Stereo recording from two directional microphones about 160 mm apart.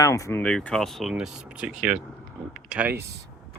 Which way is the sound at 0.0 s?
20° left (ahead or behind).